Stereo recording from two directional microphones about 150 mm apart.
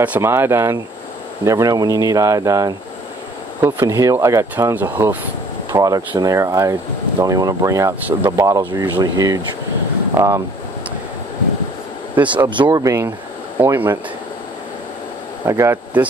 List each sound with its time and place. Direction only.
0.0 s speech: 15° right (ahead or behind)
5.7 s speech: 25° right (ahead or behind)
12.4 s speech: 30° right (ahead or behind); by 13.9 s 15° right (ahead or behind)
15.4 s speech: 20° right (ahead or behind)